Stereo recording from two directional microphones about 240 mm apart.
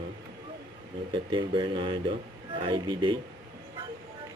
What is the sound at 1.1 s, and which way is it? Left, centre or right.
Speech, right.